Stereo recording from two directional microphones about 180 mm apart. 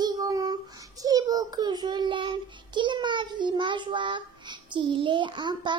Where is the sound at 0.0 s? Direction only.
20° right (ahead or behind).